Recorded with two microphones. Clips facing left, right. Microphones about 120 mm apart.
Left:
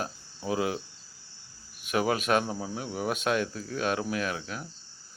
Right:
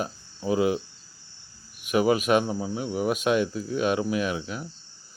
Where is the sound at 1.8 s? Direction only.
5° right (ahead or behind).